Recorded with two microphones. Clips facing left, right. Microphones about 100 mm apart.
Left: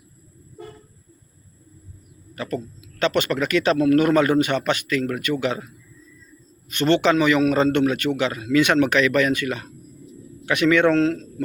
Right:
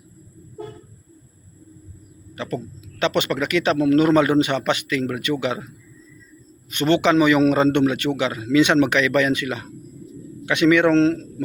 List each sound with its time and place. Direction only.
2.3 s a man's voice: 20° right (ahead or behind)
6.7 s a man's voice: 15° right (ahead or behind)
10.9 s a man's voice: 30° right (ahead or behind)